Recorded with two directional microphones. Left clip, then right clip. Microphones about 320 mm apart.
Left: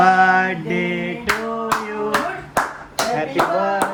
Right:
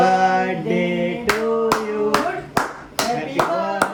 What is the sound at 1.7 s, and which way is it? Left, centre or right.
Clapping, centre.